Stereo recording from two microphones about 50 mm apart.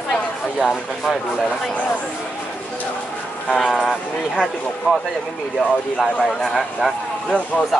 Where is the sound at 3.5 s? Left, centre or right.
Centre.